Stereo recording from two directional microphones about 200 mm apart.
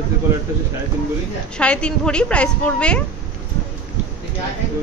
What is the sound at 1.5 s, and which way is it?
A woman's voice, 5° left (ahead or behind).